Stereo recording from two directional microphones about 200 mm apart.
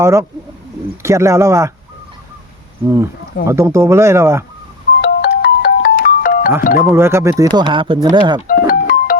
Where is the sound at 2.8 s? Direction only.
15° right (ahead or behind).